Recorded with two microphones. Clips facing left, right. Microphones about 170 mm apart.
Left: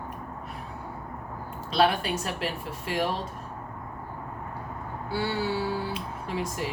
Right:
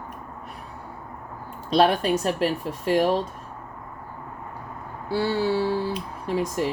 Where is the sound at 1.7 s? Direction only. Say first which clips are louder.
Right 5 dB; 40° right (ahead or behind).